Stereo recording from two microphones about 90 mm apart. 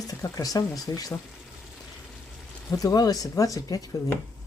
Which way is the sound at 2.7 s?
45° left (ahead or behind).